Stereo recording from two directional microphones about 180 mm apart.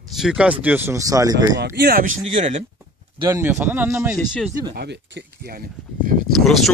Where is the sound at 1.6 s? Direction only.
60° right (ahead or behind).